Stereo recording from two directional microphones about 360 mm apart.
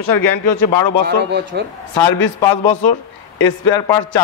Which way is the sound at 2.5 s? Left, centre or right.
Left.